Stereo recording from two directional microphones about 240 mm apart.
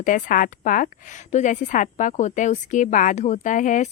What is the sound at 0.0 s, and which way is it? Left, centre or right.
Speech, left.